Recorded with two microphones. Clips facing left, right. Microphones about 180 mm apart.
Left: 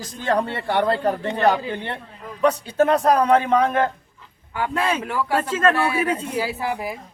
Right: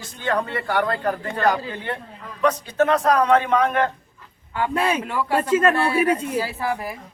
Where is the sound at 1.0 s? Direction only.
20° left (ahead or behind).